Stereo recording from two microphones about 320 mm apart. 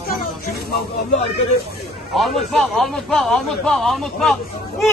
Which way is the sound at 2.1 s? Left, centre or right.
Centre.